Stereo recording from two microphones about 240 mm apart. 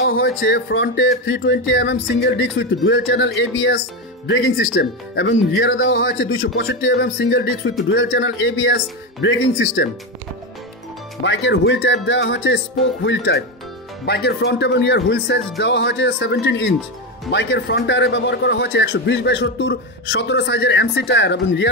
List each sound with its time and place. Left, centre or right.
0.3 s a man's voice: left
11.2 s a man's voice: left